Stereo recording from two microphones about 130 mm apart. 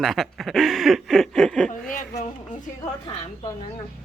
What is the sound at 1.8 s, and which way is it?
Speech, 90° left.